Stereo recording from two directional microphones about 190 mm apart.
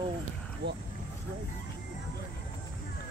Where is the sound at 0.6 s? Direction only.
65° right (ahead or behind).